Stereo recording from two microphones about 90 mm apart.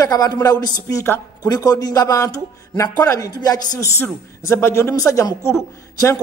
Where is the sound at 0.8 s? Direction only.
30° left (ahead or behind).